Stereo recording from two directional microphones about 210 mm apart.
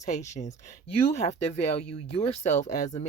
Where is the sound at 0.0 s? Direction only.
35° left (ahead or behind).